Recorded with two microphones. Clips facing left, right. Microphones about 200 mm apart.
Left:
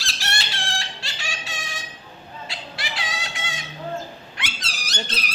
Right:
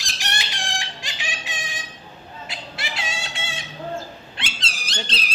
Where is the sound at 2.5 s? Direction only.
25° right (ahead or behind).